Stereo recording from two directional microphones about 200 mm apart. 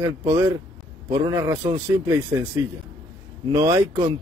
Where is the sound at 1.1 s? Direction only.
15° right (ahead or behind).